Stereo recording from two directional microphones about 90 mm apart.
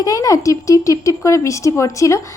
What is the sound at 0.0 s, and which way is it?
A woman's voice, 40° left (ahead or behind).